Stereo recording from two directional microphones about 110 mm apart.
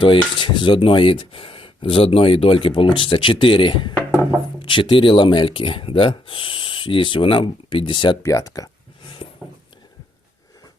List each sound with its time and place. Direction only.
0.0 s speech: 45° left (ahead or behind)
8.2 s speech: 30° left (ahead or behind)